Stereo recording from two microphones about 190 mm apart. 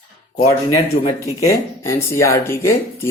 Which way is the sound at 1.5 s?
15° left (ahead or behind).